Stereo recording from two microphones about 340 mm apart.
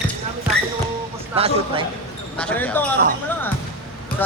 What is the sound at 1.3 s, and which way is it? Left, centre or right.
Speech, centre.